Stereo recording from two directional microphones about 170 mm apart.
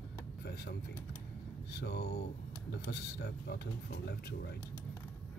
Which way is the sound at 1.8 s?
75° left (ahead or behind).